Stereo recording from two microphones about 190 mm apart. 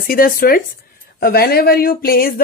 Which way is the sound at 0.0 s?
50° left (ahead or behind).